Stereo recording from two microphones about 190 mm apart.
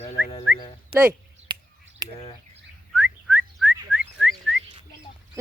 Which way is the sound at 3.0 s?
10° right (ahead or behind).